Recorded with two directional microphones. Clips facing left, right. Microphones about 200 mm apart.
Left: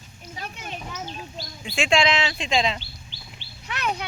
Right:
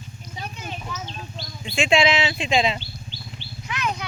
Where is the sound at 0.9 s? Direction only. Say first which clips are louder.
Right 1 dB; 10° left (ahead or behind); by 2.8 s 5° right (ahead or behind).